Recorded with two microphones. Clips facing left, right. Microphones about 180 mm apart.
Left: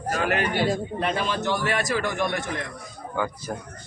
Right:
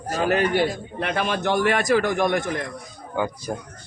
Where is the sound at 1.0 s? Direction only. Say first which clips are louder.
Right 5 dB; 60° right (ahead or behind).